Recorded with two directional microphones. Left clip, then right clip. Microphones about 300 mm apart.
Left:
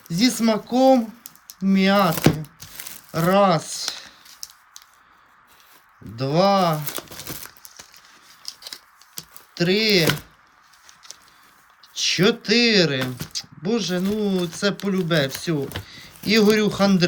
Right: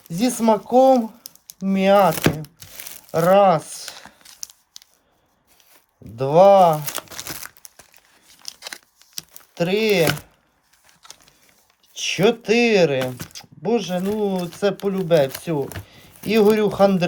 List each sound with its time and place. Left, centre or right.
0.1 s speech: centre
1.5 s crumpling: centre
6.1 s speech: centre
8.4 s scissors: right
9.6 s speech: centre
11.9 s speech: centre